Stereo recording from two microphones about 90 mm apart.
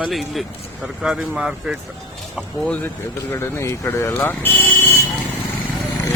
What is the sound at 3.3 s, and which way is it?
Speech, 30° left (ahead or behind).